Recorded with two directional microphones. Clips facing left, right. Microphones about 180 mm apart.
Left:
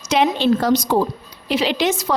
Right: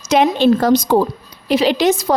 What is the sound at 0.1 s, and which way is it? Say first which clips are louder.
A woman's voice: right 4 dB; 45° right (ahead or behind).